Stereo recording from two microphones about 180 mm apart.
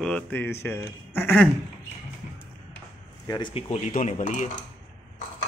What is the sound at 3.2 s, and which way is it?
Speech, 25° left (ahead or behind).